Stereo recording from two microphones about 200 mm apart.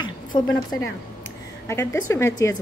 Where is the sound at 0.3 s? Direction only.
20° left (ahead or behind).